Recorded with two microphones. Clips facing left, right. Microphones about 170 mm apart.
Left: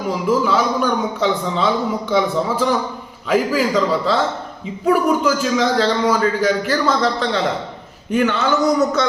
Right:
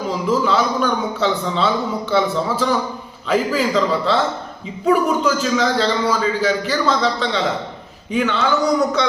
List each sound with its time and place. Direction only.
0.1 s a man's voice: 10° left (ahead or behind)